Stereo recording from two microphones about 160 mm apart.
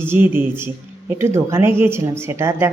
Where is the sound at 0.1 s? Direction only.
15° right (ahead or behind).